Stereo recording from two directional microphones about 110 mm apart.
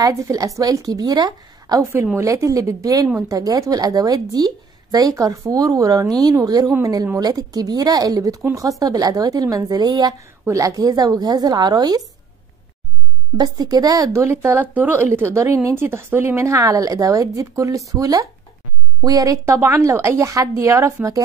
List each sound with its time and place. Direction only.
0.0 s a woman's voice: 30° right (ahead or behind)
13.4 s speech: 35° right (ahead or behind)